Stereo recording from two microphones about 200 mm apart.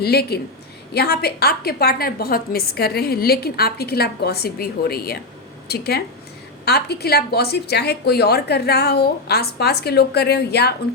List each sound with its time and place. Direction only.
0.0 s a woman's voice: 50° left (ahead or behind)